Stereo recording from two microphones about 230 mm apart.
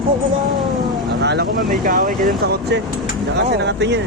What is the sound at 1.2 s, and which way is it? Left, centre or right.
Speech, right.